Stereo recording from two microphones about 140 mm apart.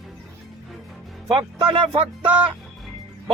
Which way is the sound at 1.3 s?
35° right (ahead or behind).